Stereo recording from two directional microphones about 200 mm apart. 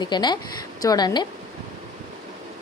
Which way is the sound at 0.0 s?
20° left (ahead or behind).